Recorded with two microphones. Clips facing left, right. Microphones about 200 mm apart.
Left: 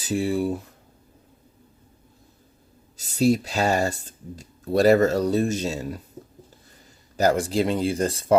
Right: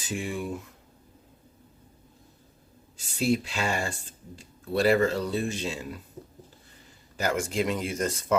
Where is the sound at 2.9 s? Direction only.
40° left (ahead or behind).